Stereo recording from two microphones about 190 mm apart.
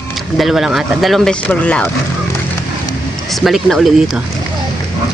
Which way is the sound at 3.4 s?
Centre (ahead or behind).